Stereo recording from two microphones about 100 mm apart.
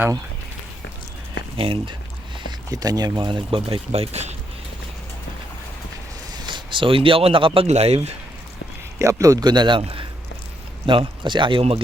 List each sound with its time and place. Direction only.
1.5 s speech: 65° right (ahead or behind)
2.5 s speech: 40° right (ahead or behind); by 4.4 s 90° right
6.3 s speech: 50° right (ahead or behind); by 8.1 s 90° right
9.0 s speech: 30° right (ahead or behind); by 9.8 s 50° right (ahead or behind)
9.8 s speech: 65° right (ahead or behind)